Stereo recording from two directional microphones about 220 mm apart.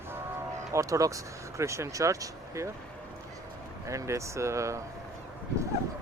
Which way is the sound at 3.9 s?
15° right (ahead or behind).